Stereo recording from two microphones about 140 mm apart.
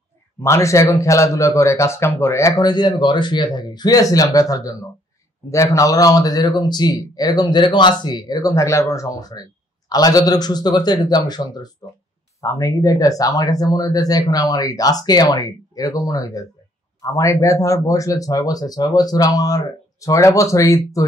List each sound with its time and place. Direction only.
0.4 s speech: 20° left (ahead or behind)